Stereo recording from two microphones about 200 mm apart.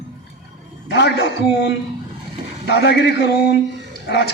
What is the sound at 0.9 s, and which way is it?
A man's voice, 55° left (ahead or behind).